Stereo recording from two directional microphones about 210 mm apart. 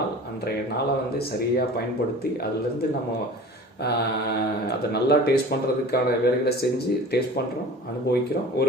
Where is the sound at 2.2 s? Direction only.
50° left (ahead or behind).